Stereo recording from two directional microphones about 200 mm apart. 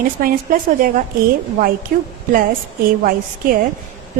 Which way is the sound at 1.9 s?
45° right (ahead or behind).